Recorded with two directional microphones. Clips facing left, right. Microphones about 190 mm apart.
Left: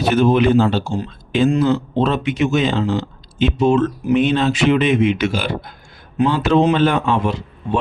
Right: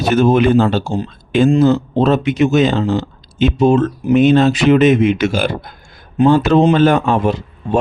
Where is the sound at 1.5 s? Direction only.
40° right (ahead or behind).